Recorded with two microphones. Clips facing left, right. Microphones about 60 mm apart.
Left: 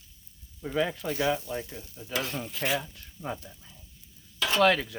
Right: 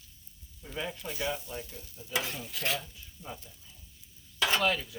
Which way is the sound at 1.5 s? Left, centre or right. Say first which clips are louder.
Left 6 dB; left.